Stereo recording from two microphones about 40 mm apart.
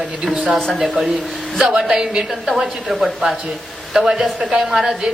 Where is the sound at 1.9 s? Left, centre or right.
Centre.